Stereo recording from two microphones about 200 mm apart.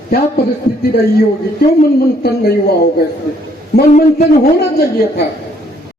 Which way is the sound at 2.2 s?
50° left (ahead or behind).